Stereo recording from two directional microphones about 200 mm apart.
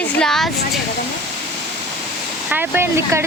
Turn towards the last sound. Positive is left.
turn(degrees=-15)  # may be behind; listen again after turning